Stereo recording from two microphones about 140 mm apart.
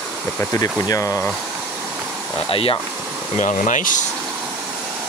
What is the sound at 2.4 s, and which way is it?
Speech, 40° left (ahead or behind).